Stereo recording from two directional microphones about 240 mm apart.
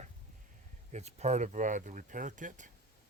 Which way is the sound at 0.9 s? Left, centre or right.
Right.